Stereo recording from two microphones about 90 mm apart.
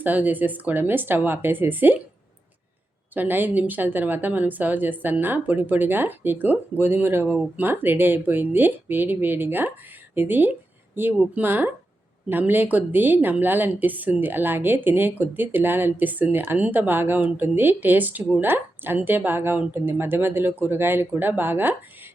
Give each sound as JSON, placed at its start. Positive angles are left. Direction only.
{"t": 0.0, "sound": "speech", "side_deg": -20}
{"t": 3.2, "sound": "speech", "side_deg": -20}